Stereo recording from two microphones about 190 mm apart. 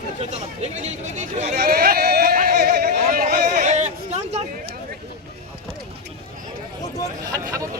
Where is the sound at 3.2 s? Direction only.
40° right (ahead or behind).